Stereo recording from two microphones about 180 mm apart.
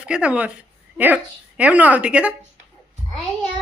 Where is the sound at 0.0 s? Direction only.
5° right (ahead or behind).